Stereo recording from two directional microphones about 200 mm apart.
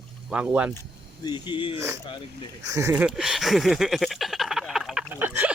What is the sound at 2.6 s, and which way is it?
Speech, 15° right (ahead or behind).